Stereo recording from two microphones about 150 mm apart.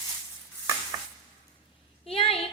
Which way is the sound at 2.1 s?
40° left (ahead or behind).